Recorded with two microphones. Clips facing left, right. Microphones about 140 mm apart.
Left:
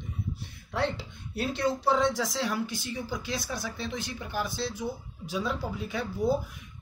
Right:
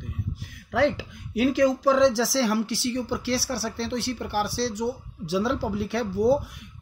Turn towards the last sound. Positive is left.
turn(degrees=-80)